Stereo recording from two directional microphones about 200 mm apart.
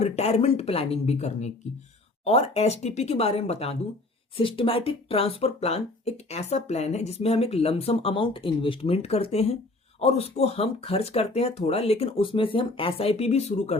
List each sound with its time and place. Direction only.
0.0 s speech: 30° left (ahead or behind)